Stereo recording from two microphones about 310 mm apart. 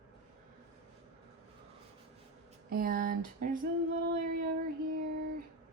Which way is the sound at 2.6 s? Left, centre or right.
Right.